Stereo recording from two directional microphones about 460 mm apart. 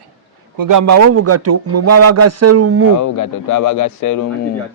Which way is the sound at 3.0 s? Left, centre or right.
Left.